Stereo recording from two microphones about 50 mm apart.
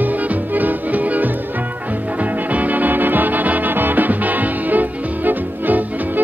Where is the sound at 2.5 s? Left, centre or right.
Right.